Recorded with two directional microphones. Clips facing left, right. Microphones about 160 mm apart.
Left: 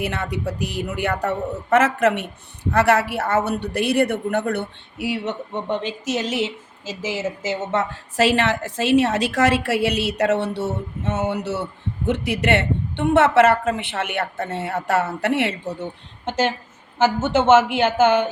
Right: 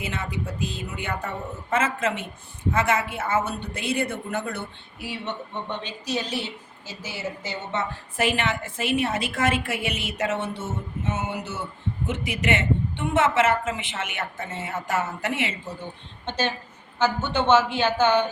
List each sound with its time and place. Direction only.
0.0 s a woman's voice: 70° left (ahead or behind)
17.0 s speech: 90° left